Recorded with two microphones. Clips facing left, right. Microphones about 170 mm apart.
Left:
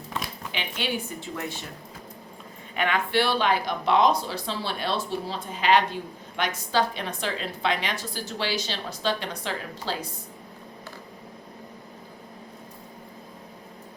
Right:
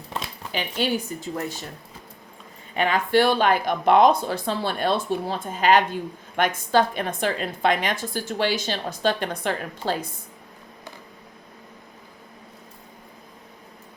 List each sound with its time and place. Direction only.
0.5 s a woman's voice: 40° right (ahead or behind)
2.7 s speech: 35° right (ahead or behind); by 10.1 s 50° right (ahead or behind)